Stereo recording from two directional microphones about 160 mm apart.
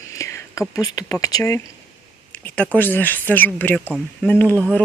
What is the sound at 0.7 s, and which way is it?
Speech, 20° left (ahead or behind).